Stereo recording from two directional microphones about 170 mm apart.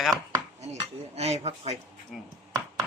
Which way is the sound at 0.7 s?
40° right (ahead or behind).